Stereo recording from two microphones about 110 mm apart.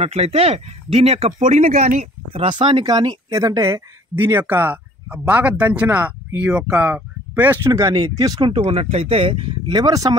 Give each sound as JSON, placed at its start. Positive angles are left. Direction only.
{"t": 0.0, "sound": "speech", "side_deg": -70}
{"t": 2.4, "sound": "speech", "side_deg": -50}
{"t": 2.8, "sound": "speech", "side_deg": -35}
{"t": 8.2, "sound": "speech", "side_deg": -35}
{"t": 8.5, "sound": "speech", "side_deg": -65}